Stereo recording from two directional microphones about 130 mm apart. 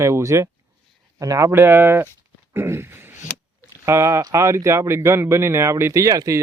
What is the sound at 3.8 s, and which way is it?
Speech, 20° right (ahead or behind).